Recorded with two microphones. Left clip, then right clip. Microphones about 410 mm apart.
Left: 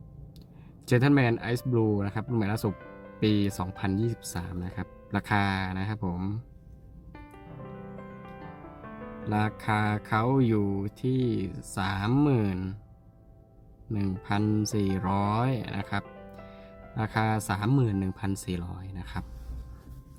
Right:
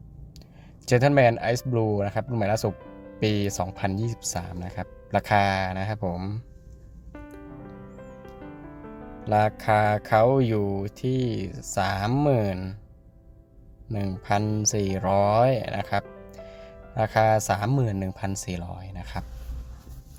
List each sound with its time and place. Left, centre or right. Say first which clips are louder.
0.9 s speech: right 6 dB; centre
9.3 s speech: right 8 dB; centre
13.8 s speech: right 4 dB; centre